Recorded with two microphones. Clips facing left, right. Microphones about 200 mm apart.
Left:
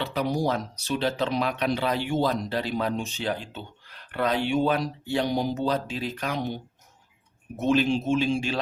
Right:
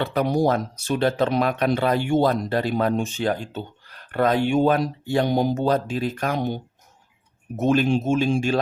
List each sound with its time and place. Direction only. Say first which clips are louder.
0.0 s speech: right 5 dB; 55° right (ahead or behind)